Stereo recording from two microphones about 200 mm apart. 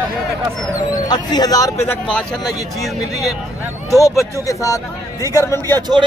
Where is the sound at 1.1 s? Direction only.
20° left (ahead or behind).